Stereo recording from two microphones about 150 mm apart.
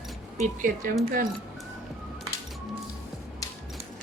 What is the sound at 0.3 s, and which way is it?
Speech, 60° right (ahead or behind).